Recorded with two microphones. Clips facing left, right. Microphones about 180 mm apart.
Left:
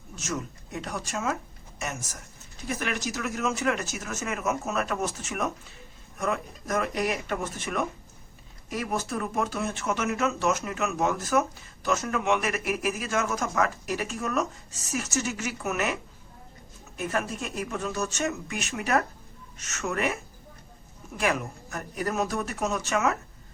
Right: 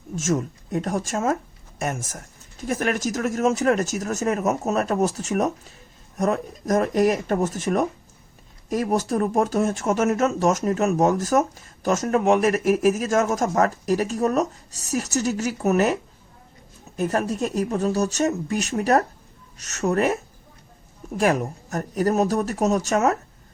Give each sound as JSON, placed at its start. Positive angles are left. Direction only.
{"t": 0.2, "sound": "speech", "side_deg": -45}
{"t": 17.0, "sound": "speech", "side_deg": -40}
{"t": 21.2, "sound": "speech", "side_deg": -40}